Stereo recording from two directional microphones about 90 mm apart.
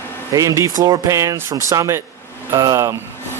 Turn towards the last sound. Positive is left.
turn(degrees=-35)  # may be behind; listen again after turning